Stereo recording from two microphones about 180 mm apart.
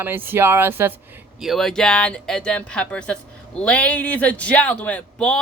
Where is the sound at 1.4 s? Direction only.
Centre (ahead or behind).